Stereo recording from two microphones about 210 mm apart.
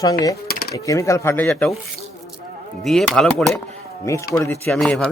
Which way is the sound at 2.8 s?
Centre (ahead or behind).